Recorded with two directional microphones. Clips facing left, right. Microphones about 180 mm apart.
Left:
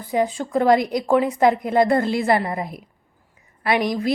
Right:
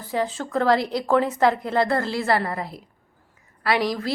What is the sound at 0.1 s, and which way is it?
A woman's voice, 15° left (ahead or behind).